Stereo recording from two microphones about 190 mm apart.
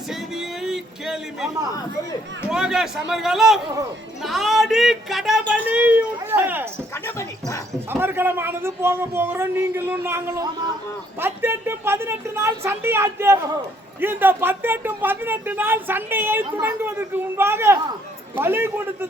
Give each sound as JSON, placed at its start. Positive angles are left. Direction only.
{"t": 0.1, "sound": "music", "side_deg": -5}
{"t": 2.5, "sound": "speech", "side_deg": -5}
{"t": 6.9, "sound": "speech", "side_deg": 15}
{"t": 7.7, "sound": "speech", "side_deg": -10}